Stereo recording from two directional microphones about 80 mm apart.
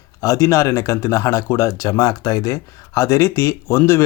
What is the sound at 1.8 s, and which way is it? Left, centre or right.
Speech, left.